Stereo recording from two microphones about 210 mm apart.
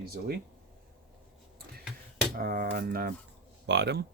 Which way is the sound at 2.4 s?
45° right (ahead or behind).